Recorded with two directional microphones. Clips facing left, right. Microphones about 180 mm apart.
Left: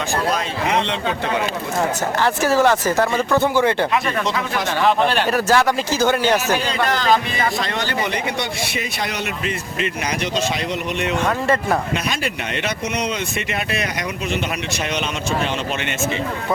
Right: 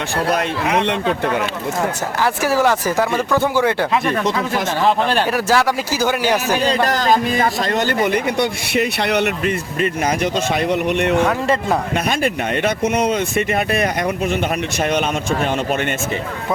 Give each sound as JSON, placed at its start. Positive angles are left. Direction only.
{"t": 0.3, "sound": "speech", "side_deg": -55}
{"t": 2.2, "sound": "speech", "side_deg": -10}
{"t": 5.2, "sound": "speech", "side_deg": -10}
{"t": 6.7, "sound": "a man's voice", "side_deg": -40}